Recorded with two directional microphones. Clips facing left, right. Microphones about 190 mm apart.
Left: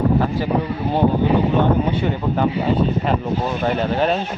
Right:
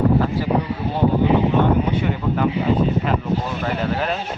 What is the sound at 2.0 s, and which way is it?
Speech, 30° left (ahead or behind).